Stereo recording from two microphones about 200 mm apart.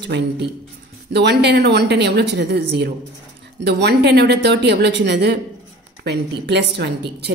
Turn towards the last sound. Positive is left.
turn(degrees=-60)  # may be behind; listen again after turning